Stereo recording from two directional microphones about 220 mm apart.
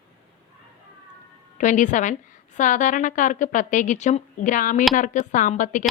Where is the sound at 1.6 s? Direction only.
35° left (ahead or behind).